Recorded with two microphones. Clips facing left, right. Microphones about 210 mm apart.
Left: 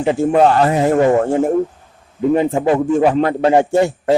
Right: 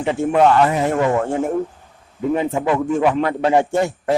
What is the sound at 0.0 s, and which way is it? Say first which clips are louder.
A man's voice: left 3 dB; 35° left (ahead or behind).